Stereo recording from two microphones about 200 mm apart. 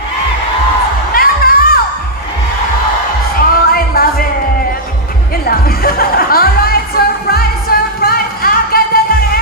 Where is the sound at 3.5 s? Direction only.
50° left (ahead or behind).